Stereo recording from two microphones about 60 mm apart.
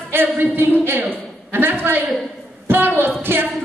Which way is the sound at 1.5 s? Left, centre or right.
Right.